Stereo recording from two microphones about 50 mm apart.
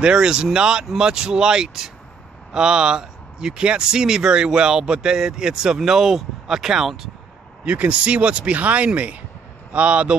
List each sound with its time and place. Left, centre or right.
0.0 s speech: centre
7.6 s speech: right